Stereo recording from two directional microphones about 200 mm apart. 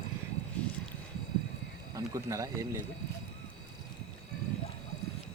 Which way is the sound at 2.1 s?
15° right (ahead or behind).